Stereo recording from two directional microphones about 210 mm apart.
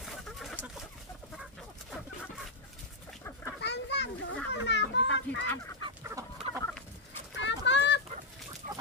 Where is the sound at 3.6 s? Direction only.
55° left (ahead or behind).